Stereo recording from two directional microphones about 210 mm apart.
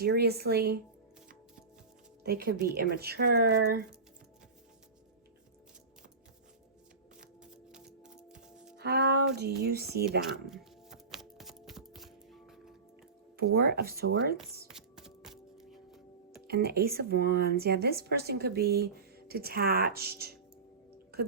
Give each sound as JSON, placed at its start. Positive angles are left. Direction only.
{"t": 0.0, "sound": "speech", "side_deg": -50}
{"t": 2.2, "sound": "speech", "side_deg": -45}
{"t": 7.2, "sound": "music", "side_deg": -5}
{"t": 8.8, "sound": "speech", "side_deg": -50}
{"t": 10.4, "sound": "music", "side_deg": 0}
{"t": 13.3, "sound": "speech", "side_deg": -45}
{"t": 14.7, "sound": "music", "side_deg": 0}
{"t": 16.5, "sound": "speech", "side_deg": -50}
{"t": 21.1, "sound": "a sound", "side_deg": -45}